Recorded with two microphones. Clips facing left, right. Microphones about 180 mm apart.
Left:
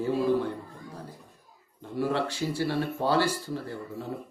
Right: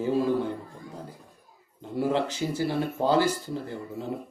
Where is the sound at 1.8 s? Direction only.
20° right (ahead or behind).